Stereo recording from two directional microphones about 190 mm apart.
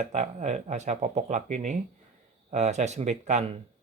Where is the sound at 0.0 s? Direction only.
40° right (ahead or behind).